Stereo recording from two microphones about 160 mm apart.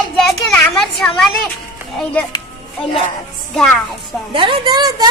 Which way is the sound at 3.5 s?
5° left (ahead or behind).